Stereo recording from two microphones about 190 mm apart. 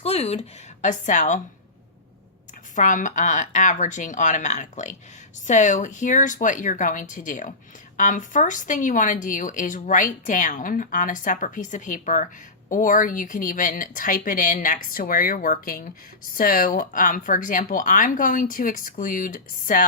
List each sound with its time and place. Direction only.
0.0 s speech: 35° left (ahead or behind)
2.7 s speech: 40° left (ahead or behind)